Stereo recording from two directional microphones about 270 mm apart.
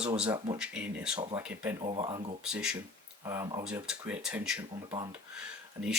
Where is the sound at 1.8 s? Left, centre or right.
Centre.